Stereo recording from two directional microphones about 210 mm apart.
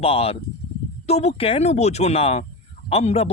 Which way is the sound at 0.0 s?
30° left (ahead or behind).